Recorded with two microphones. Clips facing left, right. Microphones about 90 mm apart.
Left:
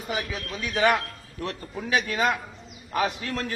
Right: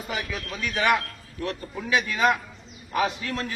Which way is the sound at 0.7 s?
30° left (ahead or behind).